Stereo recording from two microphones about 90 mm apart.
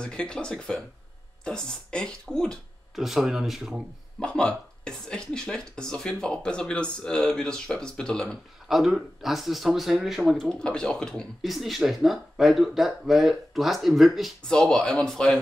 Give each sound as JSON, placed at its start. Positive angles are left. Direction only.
{"t": 0.0, "sound": "speech", "side_deg": 10}
{"t": 3.0, "sound": "speech", "side_deg": -5}
{"t": 4.2, "sound": "speech", "side_deg": 10}
{"t": 8.6, "sound": "speech", "side_deg": -5}
{"t": 10.5, "sound": "speech", "side_deg": 10}